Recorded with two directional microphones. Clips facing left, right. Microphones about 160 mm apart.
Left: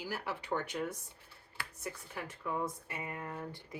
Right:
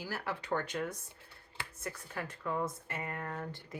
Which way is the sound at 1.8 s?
15° left (ahead or behind).